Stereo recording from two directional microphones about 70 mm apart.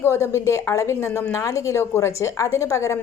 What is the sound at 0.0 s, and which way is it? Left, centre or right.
A woman's voice, left.